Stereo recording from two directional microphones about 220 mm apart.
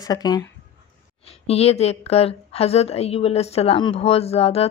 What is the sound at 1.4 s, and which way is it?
A woman's voice, 30° left (ahead or behind).